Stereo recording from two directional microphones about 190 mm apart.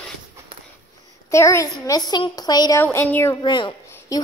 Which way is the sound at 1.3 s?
15° left (ahead or behind).